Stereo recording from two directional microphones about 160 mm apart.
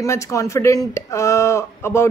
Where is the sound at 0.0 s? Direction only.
20° left (ahead or behind).